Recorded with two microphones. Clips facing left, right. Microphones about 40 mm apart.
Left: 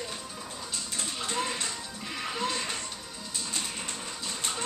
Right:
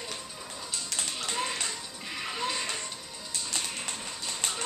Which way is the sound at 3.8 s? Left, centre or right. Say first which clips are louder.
Even; centre.